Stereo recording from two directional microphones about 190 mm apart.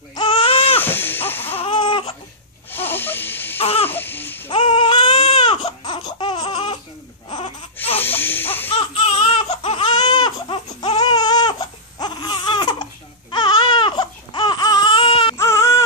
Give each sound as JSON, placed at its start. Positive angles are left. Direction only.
{"t": 0.1, "sound": "baby cry", "side_deg": 25}
{"t": 0.7, "sound": "a sound", "side_deg": 10}
{"t": 1.6, "sound": "a sound", "side_deg": 25}
{"t": 2.7, "sound": "wheeze", "side_deg": 10}
{"t": 3.5, "sound": "babbling", "side_deg": 30}
{"t": 3.9, "sound": "babbling", "side_deg": 10}
{"t": 4.5, "sound": "baby cry", "side_deg": 25}
{"t": 7.2, "sound": "laughter", "side_deg": 25}
{"t": 8.0, "sound": "baby cry", "side_deg": 10}
{"t": 8.6, "sound": "baby cry", "side_deg": 30}
{"t": 15.3, "sound": "baby cry", "side_deg": 15}